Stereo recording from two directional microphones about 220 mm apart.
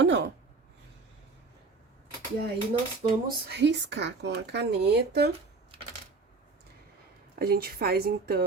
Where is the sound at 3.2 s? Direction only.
50° right (ahead or behind).